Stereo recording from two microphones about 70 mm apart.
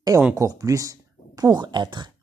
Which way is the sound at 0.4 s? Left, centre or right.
Right.